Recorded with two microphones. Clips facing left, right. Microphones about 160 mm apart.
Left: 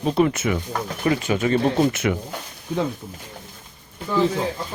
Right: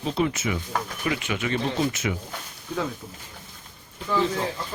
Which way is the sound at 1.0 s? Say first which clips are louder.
Left 9 dB; 40° left (ahead or behind).